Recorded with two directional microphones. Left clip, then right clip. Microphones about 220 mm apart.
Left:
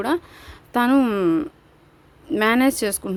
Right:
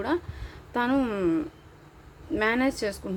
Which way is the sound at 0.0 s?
45° left (ahead or behind).